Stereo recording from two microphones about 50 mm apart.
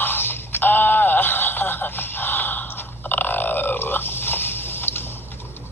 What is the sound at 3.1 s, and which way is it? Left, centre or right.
Burping, left.